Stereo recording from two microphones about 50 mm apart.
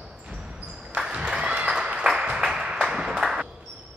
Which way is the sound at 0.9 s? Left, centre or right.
Centre.